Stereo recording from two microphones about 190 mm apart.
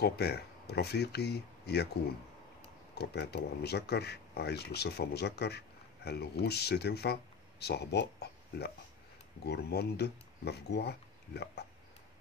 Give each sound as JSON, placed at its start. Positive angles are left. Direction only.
{"t": 0.0, "sound": "speech", "side_deg": 55}
{"t": 2.9, "sound": "speech", "side_deg": 60}